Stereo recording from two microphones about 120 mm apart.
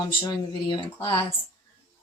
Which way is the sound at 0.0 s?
40° left (ahead or behind).